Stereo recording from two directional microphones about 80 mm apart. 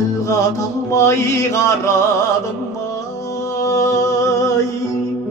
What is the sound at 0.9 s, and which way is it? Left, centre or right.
Music, left.